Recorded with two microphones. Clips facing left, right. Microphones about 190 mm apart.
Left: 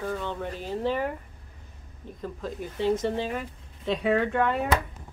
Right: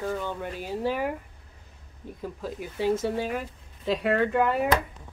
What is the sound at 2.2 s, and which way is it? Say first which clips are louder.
Speech: even; 5° right (ahead or behind).